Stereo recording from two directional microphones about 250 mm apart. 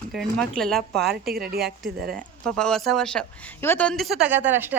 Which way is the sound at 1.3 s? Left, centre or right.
Right.